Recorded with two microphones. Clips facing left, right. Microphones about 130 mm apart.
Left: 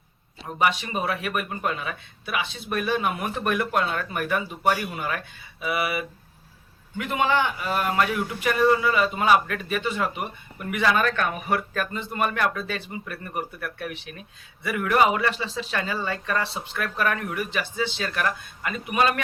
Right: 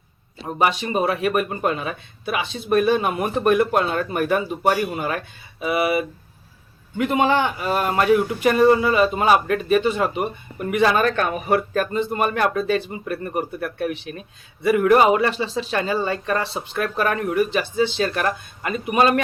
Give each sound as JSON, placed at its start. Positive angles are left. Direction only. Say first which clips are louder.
{"t": 0.9, "sound": "a man's voice", "louder": "right 7 dB", "side_deg": -30}